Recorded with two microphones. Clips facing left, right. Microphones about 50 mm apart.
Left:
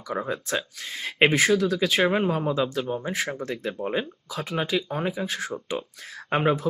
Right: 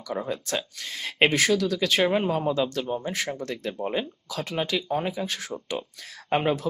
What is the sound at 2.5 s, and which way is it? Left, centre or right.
Speech, centre.